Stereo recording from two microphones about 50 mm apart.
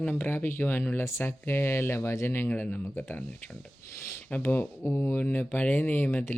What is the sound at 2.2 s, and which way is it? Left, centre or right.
Speech, left.